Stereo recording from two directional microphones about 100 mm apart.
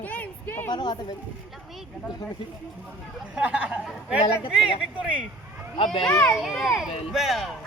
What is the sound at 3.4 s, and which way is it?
Fowl, 10° right (ahead or behind).